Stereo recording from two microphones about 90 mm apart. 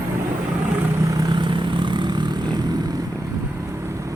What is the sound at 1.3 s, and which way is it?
Vehicle, 60° right (ahead or behind).